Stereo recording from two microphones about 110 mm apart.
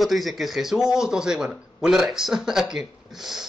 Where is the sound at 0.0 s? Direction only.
Centre (ahead or behind).